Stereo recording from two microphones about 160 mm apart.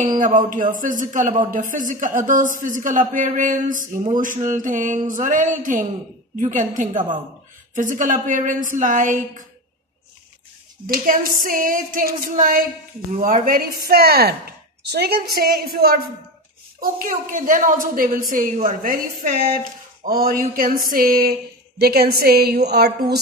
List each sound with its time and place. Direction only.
0.2 s a woman's voice: 50° right (ahead or behind)
10.9 s speech: 60° right (ahead or behind)
16.8 s speech: 60° right (ahead or behind)
22.7 s a sound: 85° right